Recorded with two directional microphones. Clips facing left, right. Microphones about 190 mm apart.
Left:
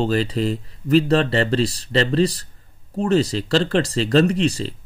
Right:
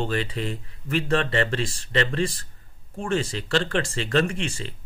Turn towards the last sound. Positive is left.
turn(degrees=35)  # may be behind; listen again after turning